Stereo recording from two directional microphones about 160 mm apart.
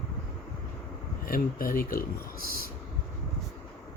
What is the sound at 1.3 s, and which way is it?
Speech, 65° left (ahead or behind).